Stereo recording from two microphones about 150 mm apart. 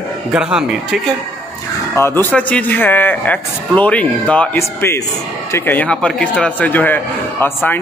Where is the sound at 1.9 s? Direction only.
15° left (ahead or behind).